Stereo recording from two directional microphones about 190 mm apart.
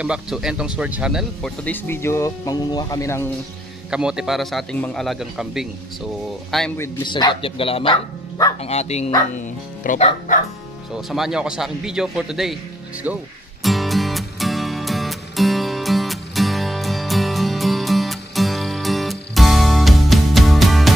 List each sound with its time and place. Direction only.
0.0 s a man's voice: 5° right (ahead or behind)
1.6 s speech: 10° left (ahead or behind)
3.9 s a man's voice: 5° right (ahead or behind)
6.8 s speech: 20° left (ahead or behind)
8.5 s speech: 35° left (ahead or behind)
11.0 s a man's voice: centre (ahead or behind)
13.0 s music: 5° right (ahead or behind)